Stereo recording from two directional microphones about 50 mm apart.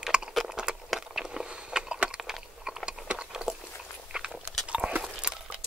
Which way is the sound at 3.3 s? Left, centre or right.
Centre.